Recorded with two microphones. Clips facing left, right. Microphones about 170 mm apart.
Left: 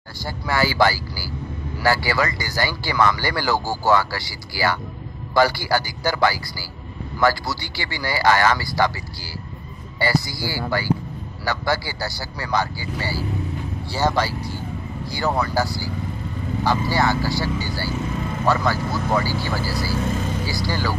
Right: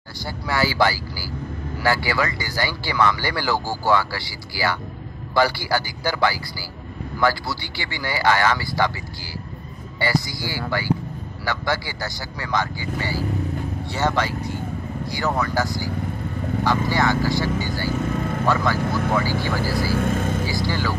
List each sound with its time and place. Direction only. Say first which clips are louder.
0.2 s speech: left 1 dB; 45° left (ahead or behind)
9.9 s speech: left 1 dB; 35° left (ahead or behind)
18.9 s speech: even; 60° right (ahead or behind)
20.4 s speech: right 1 dB; 35° left (ahead or behind)